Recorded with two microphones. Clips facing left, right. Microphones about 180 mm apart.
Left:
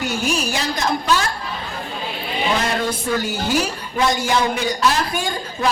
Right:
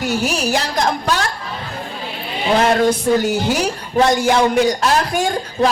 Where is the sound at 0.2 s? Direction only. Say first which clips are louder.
Right 3 dB; 70° right (ahead or behind).